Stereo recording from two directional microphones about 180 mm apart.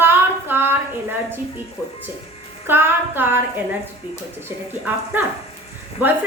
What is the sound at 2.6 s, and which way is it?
Speech, 10° right (ahead or behind).